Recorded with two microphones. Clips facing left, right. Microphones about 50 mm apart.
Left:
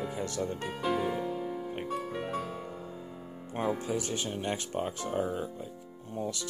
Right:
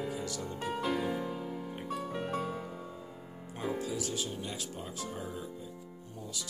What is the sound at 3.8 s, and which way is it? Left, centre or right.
Speech, left.